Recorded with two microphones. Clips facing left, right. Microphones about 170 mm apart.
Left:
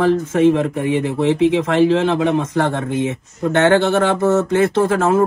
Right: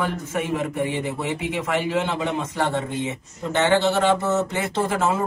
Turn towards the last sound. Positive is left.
turn(degrees=60)  # may be behind; listen again after turning